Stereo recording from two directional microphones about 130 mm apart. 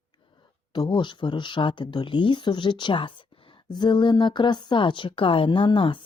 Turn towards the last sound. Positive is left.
turn(degrees=40)  # may be behind; listen again after turning